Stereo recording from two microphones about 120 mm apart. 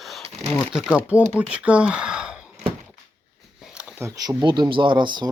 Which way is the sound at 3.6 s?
5° right (ahead or behind).